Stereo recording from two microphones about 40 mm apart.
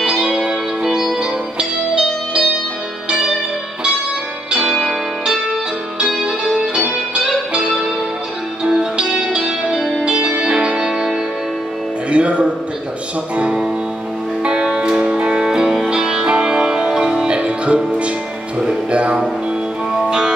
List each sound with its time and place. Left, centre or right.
0.0 s music: centre
4.5 s music: right
8.6 s music: centre
10.8 s music: centre
12.1 s music: right; by 16.3 s centre
16.3 s music: right
17.3 s music: right
18.9 s music: right
20.1 s music: centre